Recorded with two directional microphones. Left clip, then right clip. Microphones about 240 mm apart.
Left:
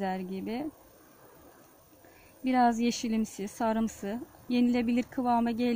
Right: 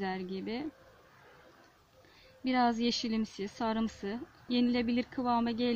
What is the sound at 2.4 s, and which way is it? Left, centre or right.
A woman's voice, left.